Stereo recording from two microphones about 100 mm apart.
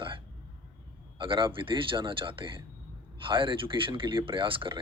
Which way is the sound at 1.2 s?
60° right (ahead or behind).